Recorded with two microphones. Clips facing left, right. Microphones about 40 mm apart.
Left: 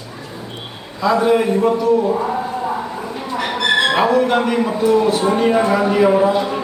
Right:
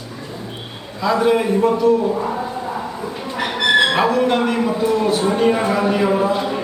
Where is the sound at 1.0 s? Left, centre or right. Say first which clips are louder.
Left 2 dB; centre.